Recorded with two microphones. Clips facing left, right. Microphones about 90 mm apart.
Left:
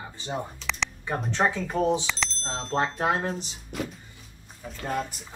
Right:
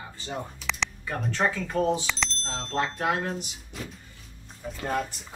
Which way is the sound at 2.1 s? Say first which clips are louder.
Even; centre (ahead or behind).